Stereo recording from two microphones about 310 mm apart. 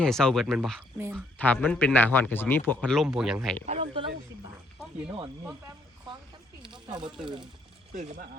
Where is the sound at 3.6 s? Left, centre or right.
Centre.